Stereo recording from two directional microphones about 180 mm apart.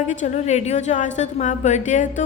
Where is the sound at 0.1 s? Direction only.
40° left (ahead or behind).